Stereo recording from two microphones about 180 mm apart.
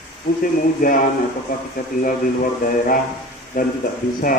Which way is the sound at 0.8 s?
50° left (ahead or behind).